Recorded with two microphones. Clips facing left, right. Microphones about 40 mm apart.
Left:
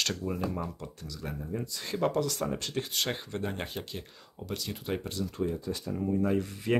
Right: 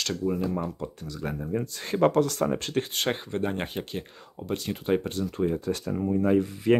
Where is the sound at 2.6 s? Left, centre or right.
Right.